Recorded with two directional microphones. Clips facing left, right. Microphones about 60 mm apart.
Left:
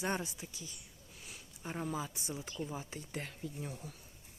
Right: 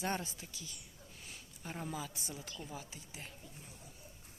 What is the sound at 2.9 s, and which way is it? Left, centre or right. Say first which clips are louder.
Speech: left 7 dB; left.